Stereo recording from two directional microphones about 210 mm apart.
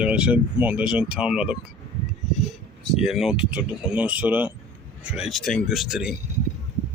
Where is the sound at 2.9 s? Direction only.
Centre (ahead or behind).